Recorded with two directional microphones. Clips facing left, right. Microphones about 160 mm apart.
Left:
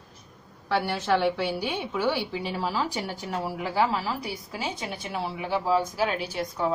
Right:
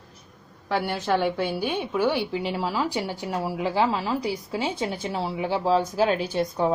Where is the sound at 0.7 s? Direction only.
15° right (ahead or behind).